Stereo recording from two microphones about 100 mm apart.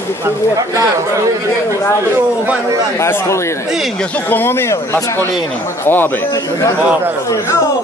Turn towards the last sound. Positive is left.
turn(degrees=20)  # may be behind; listen again after turning